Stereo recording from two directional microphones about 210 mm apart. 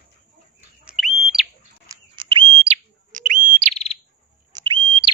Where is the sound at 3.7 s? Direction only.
30° left (ahead or behind).